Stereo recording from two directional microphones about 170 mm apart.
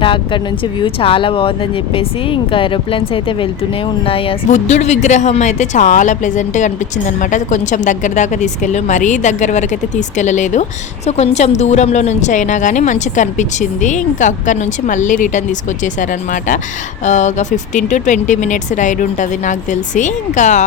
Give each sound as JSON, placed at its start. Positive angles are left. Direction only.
{"t": 0.0, "sound": "speech", "side_deg": 30}
{"t": 4.4, "sound": "speech", "side_deg": 45}